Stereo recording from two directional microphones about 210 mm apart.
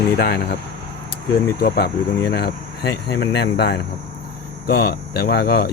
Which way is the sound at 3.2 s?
55° left (ahead or behind).